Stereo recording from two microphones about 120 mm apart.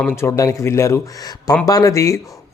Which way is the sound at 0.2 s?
25° left (ahead or behind).